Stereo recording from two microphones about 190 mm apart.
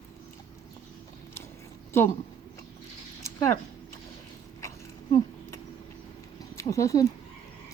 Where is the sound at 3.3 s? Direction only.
15° left (ahead or behind).